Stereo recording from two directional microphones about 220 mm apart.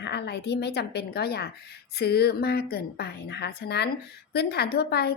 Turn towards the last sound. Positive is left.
turn(degrees=45)  # may be behind; listen again after turning